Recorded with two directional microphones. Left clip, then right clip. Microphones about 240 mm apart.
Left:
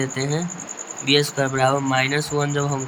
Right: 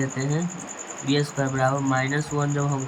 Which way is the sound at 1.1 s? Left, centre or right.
Left.